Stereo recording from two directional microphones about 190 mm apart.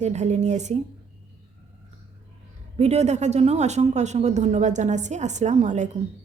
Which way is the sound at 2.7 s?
35° right (ahead or behind).